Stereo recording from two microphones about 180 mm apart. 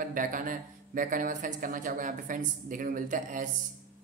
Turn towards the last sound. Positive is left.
turn(degrees=-45)  # may be behind; listen again after turning